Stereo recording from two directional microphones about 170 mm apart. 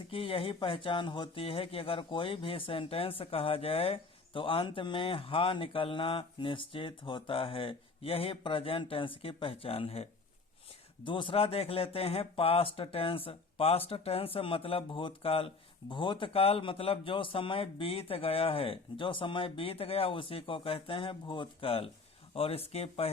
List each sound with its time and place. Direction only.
0.1 s speech: 30° left (ahead or behind)